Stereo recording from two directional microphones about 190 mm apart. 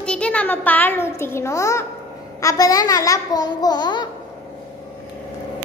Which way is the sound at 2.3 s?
15° left (ahead or behind).